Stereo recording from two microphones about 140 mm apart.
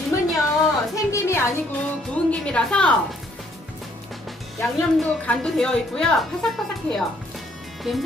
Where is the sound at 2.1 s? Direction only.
10° left (ahead or behind).